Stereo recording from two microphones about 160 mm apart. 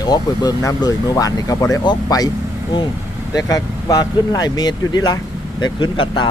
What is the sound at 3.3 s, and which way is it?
Speech, 20° left (ahead or behind).